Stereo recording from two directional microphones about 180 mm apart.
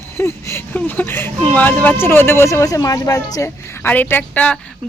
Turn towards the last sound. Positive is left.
turn(degrees=10)  # may be behind; listen again after turning